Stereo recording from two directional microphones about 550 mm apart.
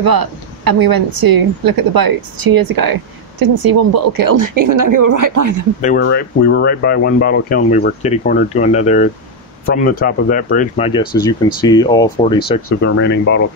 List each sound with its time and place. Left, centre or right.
0.0 s a woman's voice: right
5.8 s speech: centre